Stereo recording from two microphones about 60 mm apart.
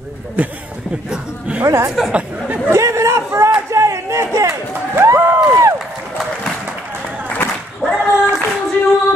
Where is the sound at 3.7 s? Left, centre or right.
Right.